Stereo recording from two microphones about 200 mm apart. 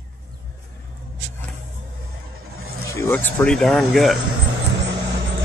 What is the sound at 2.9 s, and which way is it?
Speech, 10° left (ahead or behind).